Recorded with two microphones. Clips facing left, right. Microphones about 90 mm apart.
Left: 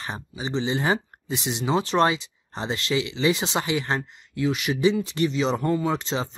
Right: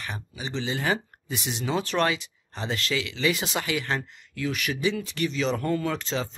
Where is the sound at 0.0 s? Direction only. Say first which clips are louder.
Left 3 dB; 25° left (ahead or behind).